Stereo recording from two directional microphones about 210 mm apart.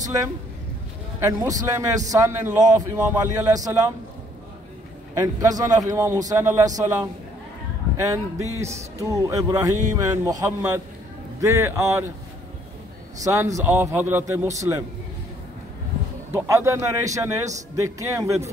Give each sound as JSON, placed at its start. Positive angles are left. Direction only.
{"t": 0.0, "sound": "a man's voice", "side_deg": -15}
{"t": 5.1, "sound": "a man's voice", "side_deg": -15}
{"t": 13.2, "sound": "a man's voice", "side_deg": -15}
{"t": 16.3, "sound": "a man's voice", "side_deg": -15}